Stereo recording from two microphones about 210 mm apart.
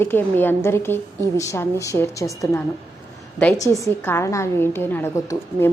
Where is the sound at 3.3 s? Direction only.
10° left (ahead or behind).